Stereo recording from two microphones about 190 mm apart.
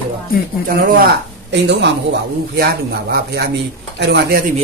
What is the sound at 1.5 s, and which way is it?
Speech, 65° right (ahead or behind).